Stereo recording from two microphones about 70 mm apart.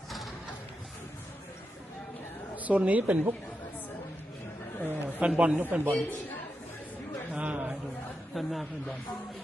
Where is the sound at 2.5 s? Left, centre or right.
Right.